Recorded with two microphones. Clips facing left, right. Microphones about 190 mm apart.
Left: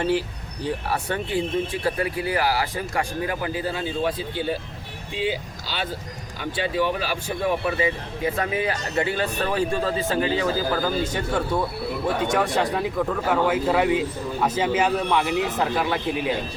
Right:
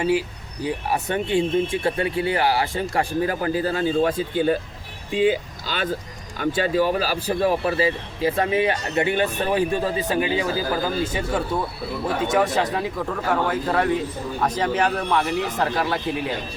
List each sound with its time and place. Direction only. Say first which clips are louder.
0.0 s speech: right 2 dB; 10° right (ahead or behind)